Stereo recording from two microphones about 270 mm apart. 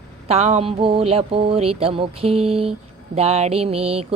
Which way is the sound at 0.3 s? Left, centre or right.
Right.